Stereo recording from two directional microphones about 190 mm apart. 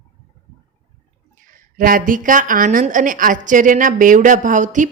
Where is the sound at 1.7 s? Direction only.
45° right (ahead or behind).